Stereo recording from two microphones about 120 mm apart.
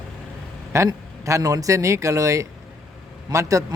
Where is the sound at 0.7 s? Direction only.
25° right (ahead or behind).